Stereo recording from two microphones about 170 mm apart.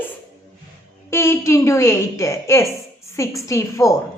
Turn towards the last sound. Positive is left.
turn(degrees=15)  # may be behind; listen again after turning